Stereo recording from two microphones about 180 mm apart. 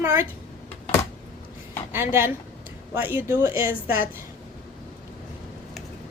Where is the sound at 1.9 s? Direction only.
15° right (ahead or behind).